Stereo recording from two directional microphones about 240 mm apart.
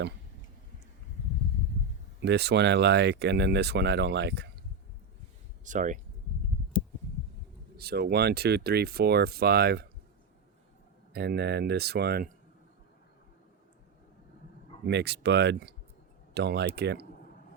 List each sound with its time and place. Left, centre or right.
2.2 s speech: right
5.6 s speech: right
7.8 s speech: right
11.1 s speech: right
14.8 s speech: right